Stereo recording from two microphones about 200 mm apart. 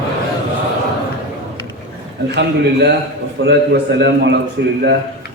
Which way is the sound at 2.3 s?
55° right (ahead or behind).